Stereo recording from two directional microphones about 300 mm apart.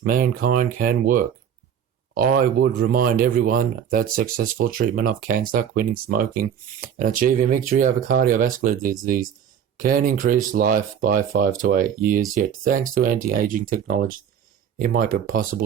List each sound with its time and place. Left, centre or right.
0.0 s speech: right